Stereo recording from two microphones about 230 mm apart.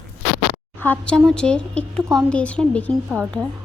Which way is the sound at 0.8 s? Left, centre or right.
Centre.